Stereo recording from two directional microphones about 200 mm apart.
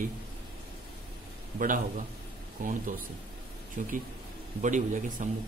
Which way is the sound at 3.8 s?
40° right (ahead or behind).